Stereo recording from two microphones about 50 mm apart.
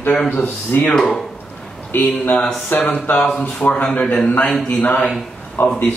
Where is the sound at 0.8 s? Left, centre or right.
Centre.